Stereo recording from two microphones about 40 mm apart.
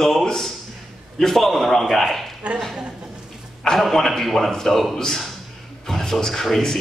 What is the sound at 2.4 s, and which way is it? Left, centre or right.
Speech, right.